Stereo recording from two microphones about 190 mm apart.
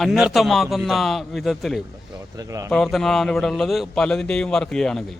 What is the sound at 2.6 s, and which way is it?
A man's voice, centre (ahead or behind).